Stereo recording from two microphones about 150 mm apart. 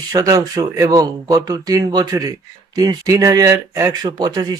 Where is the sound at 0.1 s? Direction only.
25° right (ahead or behind).